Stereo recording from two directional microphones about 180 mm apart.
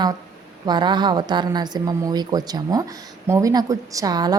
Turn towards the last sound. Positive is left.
turn(degrees=-20)  # may be behind; listen again after turning